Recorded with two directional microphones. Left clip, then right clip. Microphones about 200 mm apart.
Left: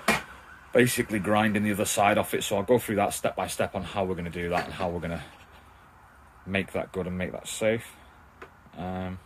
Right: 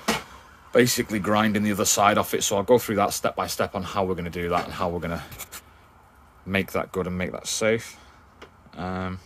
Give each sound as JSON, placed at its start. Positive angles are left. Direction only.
{"t": 0.7, "sound": "speech", "side_deg": -15}
{"t": 6.5, "sound": "speech", "side_deg": -15}